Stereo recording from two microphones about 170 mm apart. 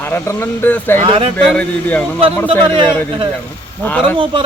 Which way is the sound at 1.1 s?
30° right (ahead or behind).